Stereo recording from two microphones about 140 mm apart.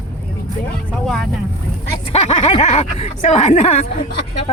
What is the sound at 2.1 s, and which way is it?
Speech, 50° left (ahead or behind).